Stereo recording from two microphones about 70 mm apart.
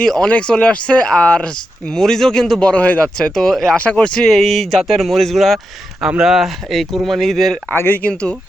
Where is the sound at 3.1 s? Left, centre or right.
Centre.